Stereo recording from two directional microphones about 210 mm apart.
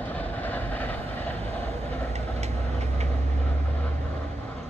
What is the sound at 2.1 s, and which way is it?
Vehicle, 30° right (ahead or behind).